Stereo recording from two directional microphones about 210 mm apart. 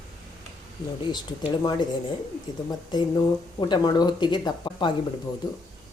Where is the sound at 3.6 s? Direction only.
20° left (ahead or behind).